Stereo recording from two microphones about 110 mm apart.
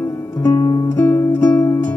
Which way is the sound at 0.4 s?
30° left (ahead or behind).